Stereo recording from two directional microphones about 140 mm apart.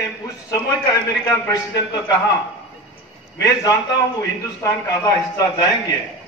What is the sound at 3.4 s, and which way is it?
A man's voice, 25° left (ahead or behind).